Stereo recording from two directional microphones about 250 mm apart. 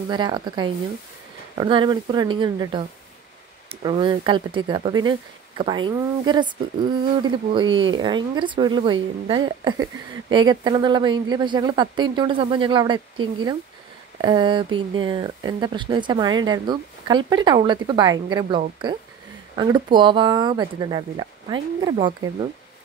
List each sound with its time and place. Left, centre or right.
0.1 s speech: centre
7.7 s speech: right
8.0 s speech: centre
14.2 s speech: centre